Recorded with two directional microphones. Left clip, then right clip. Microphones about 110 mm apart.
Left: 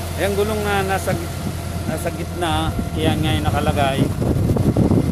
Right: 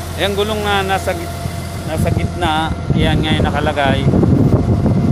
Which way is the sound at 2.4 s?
20° right (ahead or behind).